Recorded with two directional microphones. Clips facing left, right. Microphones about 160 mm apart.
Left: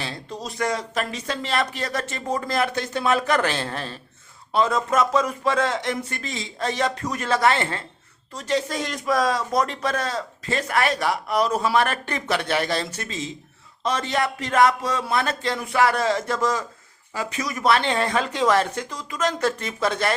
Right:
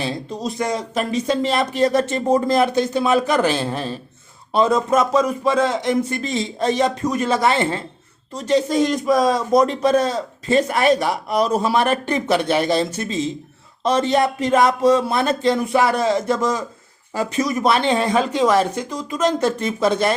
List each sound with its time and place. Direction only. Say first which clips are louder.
0.0 s speech: right 7 dB; 15° right (ahead or behind)
17.2 s speech: right 8 dB; 30° right (ahead or behind)